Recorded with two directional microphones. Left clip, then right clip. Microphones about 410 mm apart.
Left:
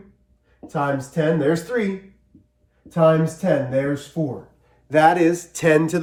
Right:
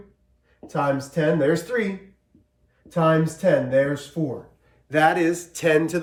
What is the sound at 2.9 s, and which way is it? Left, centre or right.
Speech, centre.